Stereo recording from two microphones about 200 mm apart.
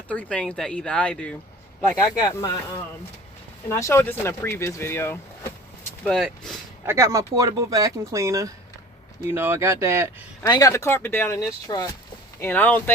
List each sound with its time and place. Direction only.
0.1 s speech: 5° left (ahead or behind)
2.1 s speech: 15° left (ahead or behind)
3.7 s speech: 15° left (ahead or behind)
6.1 s speech: centre (ahead or behind)
6.8 s speech: 15° right (ahead or behind)
10.4 s speech: 15° left (ahead or behind)
12.4 s speech: 10° left (ahead or behind)